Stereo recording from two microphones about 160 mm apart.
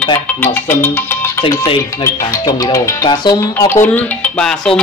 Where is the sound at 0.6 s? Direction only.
15° left (ahead or behind).